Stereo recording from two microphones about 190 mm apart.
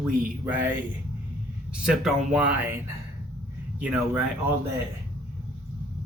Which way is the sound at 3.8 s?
5° right (ahead or behind).